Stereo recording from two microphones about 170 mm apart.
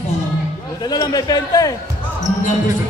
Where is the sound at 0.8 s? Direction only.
25° left (ahead or behind).